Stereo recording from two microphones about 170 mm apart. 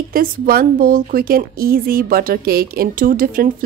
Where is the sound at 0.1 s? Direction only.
60° right (ahead or behind).